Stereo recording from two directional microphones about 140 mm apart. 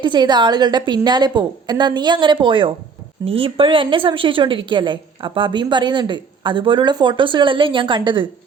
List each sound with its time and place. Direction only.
0.0 s a woman's voice: 30° right (ahead or behind)